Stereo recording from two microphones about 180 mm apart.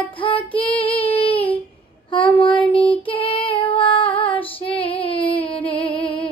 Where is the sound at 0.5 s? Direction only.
30° left (ahead or behind).